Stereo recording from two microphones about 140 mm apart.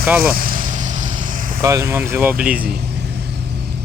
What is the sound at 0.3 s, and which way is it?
Vehicle, 85° right.